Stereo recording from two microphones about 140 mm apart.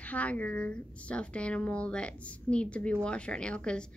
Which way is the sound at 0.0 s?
10° left (ahead or behind).